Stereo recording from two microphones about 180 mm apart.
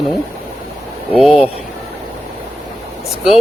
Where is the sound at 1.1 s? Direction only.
Centre (ahead or behind).